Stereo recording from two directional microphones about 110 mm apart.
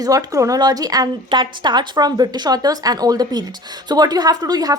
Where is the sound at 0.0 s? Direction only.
35° right (ahead or behind).